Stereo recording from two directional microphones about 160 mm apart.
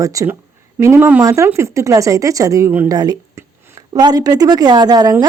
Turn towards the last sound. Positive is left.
turn(degrees=-25)  # may be behind; listen again after turning